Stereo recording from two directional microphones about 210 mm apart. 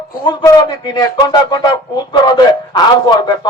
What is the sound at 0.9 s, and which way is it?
Speech, 20° left (ahead or behind).